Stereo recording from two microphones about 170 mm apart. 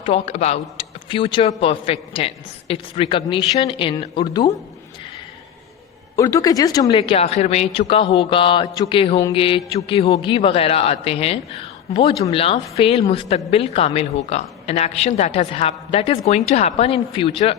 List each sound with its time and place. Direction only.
0.0 s a man's voice: 35° left (ahead or behind)
6.1 s speech: 20° left (ahead or behind)
6.9 s a man's voice: 35° left (ahead or behind)